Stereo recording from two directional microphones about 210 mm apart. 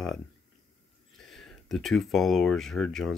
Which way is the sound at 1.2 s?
Centre (ahead or behind).